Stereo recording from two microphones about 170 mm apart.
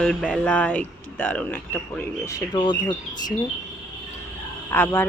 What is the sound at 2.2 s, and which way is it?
Speech, 25° left (ahead or behind).